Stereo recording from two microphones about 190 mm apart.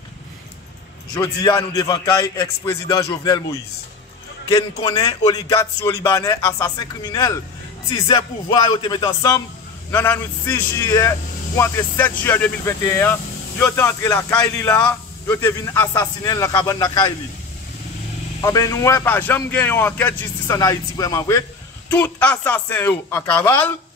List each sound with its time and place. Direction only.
1.1 s a man's voice: 20° left (ahead or behind)
4.5 s a man's voice: 20° left (ahead or behind)
18.4 s a man's voice: 15° left (ahead or behind)